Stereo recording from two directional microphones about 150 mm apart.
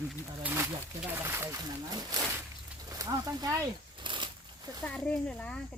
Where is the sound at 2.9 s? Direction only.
25° right (ahead or behind).